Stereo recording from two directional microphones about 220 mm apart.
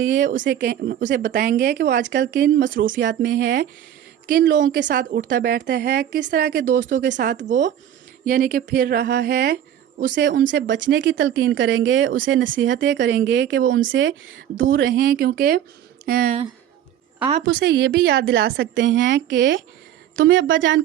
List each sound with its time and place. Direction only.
0.0 s a woman's voice: 60° right (ahead or behind)
0.6 s a woman's voice: 45° right (ahead or behind)
2.8 s a woman's voice: 60° right (ahead or behind); by 6.9 s 35° right (ahead or behind)
6.9 s a woman's voice: 55° right (ahead or behind)
7.4 s a woman's voice: 35° right (ahead or behind); by 14.9 s 60° right (ahead or behind)
14.9 s a woman's voice: 45° right (ahead or behind)
17.4 s a woman's voice: 50° right (ahead or behind)